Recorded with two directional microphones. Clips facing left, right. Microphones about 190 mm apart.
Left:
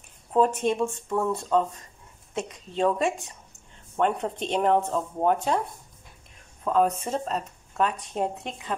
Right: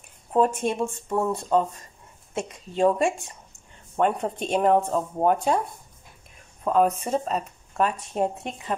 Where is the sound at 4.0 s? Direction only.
10° right (ahead or behind).